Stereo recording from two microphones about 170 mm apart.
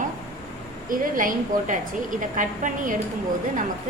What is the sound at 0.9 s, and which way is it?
A woman's voice, 55° right (ahead or behind).